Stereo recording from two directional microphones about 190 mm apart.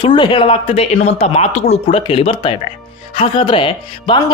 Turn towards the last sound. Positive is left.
turn(degrees=25)  # may be behind; listen again after turning